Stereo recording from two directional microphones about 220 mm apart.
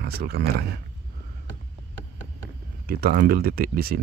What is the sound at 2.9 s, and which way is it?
Speech, 45° right (ahead or behind).